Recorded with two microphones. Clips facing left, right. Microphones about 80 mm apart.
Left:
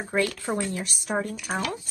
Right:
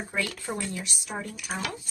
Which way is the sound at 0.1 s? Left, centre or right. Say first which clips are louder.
Left 7 dB; left.